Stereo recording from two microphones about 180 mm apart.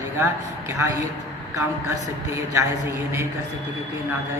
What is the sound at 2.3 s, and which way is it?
A man's voice, 15° right (ahead or behind).